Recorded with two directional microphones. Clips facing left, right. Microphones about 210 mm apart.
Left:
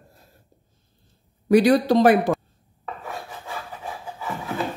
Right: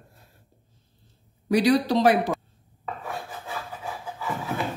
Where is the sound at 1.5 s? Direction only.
50° left (ahead or behind).